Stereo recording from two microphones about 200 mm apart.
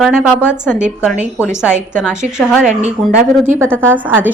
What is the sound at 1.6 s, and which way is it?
Speech, 5° right (ahead or behind).